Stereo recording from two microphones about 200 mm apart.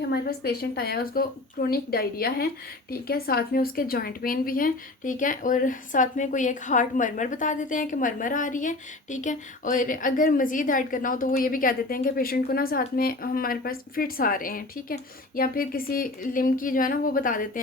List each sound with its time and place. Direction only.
0.1 s a woman's voice: 50° left (ahead or behind)